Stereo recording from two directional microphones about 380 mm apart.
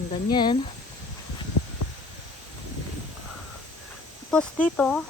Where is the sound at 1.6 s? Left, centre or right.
Left.